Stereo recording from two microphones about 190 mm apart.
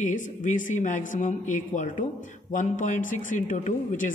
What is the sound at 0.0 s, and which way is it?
Speech, 40° left (ahead or behind).